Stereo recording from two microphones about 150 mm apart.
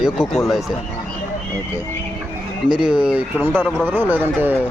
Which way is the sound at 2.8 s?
5° right (ahead or behind).